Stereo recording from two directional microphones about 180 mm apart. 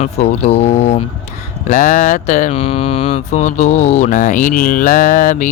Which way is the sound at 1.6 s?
45° left (ahead or behind).